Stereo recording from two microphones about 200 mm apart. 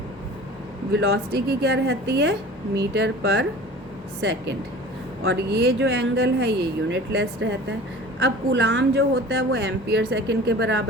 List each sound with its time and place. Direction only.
0.9 s speech: 55° right (ahead or behind)